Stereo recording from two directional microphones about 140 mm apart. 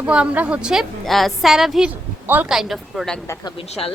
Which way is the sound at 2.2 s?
10° right (ahead or behind).